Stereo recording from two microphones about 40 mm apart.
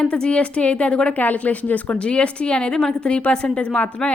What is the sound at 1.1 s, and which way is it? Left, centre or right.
Speech, left.